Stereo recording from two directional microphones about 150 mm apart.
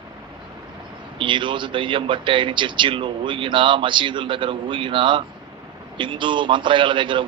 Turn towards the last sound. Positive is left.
turn(degrees=-35)  # may be behind; listen again after turning